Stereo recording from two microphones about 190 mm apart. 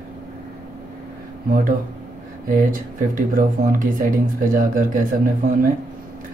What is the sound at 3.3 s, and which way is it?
Speech, 45° right (ahead or behind).